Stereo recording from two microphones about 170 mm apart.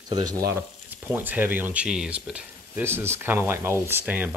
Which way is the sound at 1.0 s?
10° right (ahead or behind).